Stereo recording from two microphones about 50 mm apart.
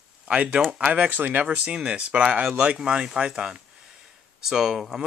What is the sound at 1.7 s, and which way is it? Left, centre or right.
Speech, centre.